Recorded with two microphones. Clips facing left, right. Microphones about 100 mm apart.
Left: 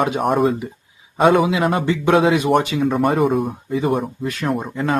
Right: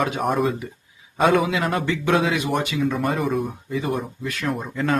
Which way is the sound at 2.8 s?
55° left (ahead or behind).